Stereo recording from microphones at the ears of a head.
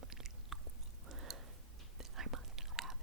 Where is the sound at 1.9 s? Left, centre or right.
Right.